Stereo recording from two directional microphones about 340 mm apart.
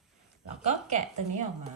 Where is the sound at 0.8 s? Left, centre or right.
Right.